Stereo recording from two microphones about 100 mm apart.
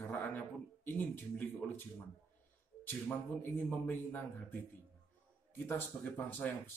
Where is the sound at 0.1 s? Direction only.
15° left (ahead or behind).